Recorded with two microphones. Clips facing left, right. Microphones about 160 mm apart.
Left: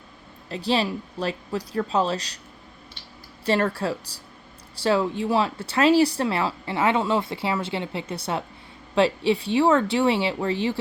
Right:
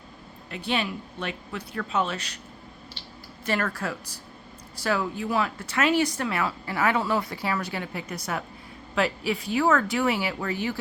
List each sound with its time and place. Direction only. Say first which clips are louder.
0.5 s speech: left 5 dB; 35° left (ahead or behind)
3.4 s speech: left 5 dB; 30° left (ahead or behind)